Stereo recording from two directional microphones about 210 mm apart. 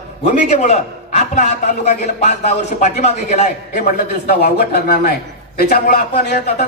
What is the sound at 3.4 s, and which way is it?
A man's voice, 45° left (ahead or behind).